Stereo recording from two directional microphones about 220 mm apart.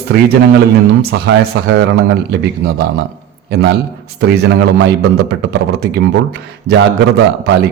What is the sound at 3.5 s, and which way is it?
A man's voice, 50° right (ahead or behind).